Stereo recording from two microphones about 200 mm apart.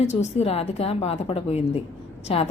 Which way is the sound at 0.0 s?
35° left (ahead or behind).